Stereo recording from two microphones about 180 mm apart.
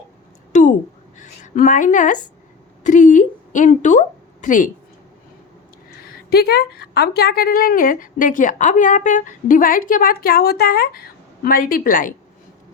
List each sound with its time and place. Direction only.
0.5 s a sound: 40° left (ahead or behind)
1.2 s a woman's voice: 45° left (ahead or behind)
6.3 s speech: 65° left (ahead or behind)